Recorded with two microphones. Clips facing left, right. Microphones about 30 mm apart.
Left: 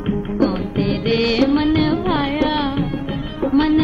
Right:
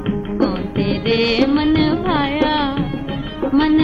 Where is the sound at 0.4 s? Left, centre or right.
Centre.